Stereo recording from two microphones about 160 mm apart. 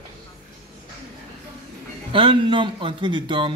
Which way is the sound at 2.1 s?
30° right (ahead or behind).